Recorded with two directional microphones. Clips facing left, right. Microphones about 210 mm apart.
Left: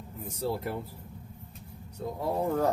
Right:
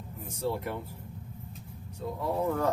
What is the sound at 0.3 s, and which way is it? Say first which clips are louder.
Speech: even; 35° left (ahead or behind).